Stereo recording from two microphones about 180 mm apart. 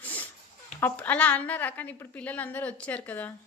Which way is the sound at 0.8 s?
10° left (ahead or behind).